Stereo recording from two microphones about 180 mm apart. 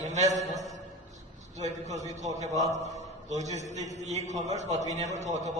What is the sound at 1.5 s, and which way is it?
A man's voice, 40° right (ahead or behind).